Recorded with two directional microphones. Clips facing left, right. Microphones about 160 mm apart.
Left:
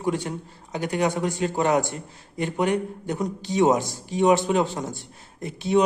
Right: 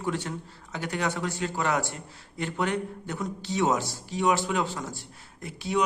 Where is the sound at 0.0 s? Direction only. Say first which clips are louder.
Left 5 dB; 15° left (ahead or behind).